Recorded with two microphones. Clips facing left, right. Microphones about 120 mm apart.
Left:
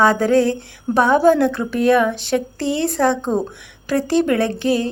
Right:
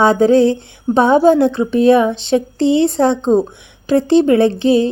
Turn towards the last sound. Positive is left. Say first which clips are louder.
# right 6 dB
turn(degrees=-25)  # may be behind; listen again after turning